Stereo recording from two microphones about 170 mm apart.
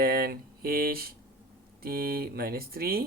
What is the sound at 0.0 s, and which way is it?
Speech, 65° right (ahead or behind).